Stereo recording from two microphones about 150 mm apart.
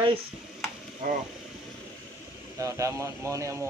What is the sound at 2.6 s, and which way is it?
Speech, 20° right (ahead or behind).